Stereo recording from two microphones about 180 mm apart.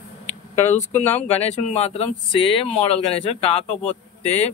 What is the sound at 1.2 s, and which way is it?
Speech, 35° left (ahead or behind).